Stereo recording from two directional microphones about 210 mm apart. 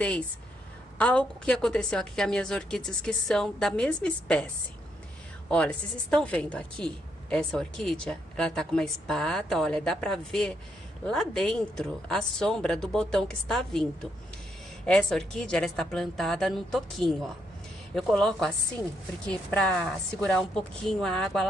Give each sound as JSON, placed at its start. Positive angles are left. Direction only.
{"t": 0.9, "sound": "a woman's voice", "side_deg": 5}
{"t": 5.5, "sound": "a woman's voice", "side_deg": 5}
{"t": 14.9, "sound": "a woman's voice", "side_deg": 5}